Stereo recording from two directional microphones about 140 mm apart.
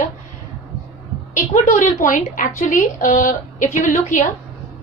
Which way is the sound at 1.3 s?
65° left (ahead or behind).